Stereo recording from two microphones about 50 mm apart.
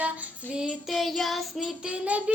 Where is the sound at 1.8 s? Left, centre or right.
Right.